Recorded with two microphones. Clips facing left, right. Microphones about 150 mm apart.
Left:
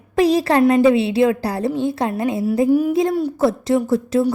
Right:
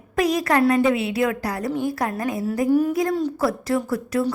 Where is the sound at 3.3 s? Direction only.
25° left (ahead or behind).